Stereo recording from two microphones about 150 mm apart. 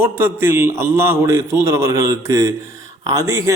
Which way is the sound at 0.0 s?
15° right (ahead or behind).